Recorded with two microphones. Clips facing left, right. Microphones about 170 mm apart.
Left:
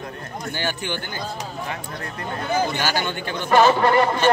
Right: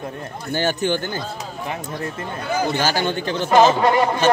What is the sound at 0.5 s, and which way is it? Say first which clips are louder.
Speech: right 7 dB; 45° right (ahead or behind).